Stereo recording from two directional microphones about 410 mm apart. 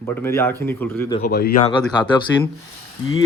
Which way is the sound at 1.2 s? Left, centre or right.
Left.